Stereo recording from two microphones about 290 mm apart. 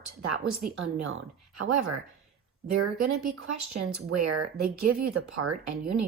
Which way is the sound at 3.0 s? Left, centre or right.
Right.